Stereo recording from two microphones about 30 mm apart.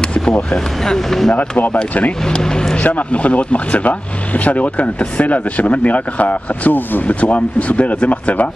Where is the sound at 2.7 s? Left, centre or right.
Left.